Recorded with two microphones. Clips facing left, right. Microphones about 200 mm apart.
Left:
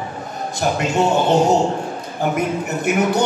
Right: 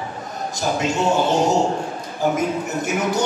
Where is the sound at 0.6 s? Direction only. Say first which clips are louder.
Left 3 dB; 65° left (ahead or behind).